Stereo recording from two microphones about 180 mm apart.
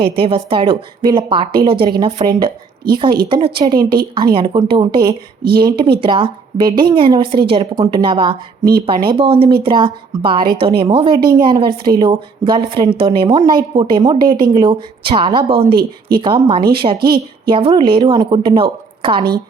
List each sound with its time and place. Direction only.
0.0 s a woman's voice: 30° right (ahead or behind)